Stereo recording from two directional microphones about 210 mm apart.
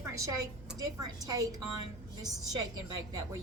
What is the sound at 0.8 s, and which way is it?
A woman's voice, 20° right (ahead or behind).